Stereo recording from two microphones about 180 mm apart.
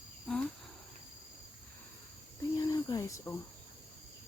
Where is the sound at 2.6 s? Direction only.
20° left (ahead or behind).